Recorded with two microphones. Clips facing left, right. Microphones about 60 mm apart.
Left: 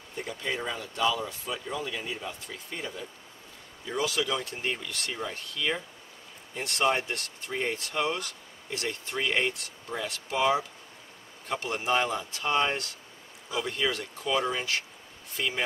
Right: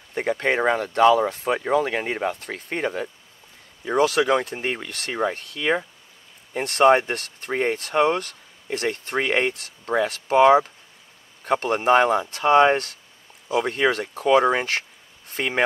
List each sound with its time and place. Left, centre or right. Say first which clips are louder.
0.1 s speech: right 11 dB; right